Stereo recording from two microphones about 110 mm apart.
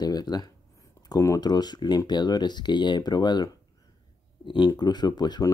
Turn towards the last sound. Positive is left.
turn(degrees=40)  # may be behind; listen again after turning